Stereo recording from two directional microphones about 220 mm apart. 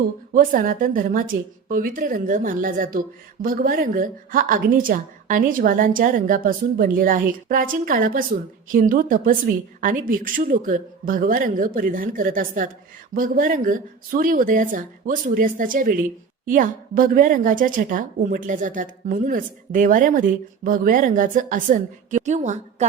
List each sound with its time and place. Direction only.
0.3 s a woman's voice: 40° right (ahead or behind)